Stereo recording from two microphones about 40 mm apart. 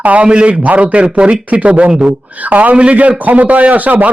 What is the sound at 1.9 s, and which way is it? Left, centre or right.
Speech, centre.